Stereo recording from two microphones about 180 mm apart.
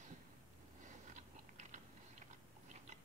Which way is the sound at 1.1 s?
40° right (ahead or behind).